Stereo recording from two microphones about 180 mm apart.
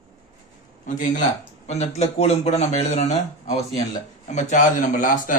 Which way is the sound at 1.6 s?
40° left (ahead or behind).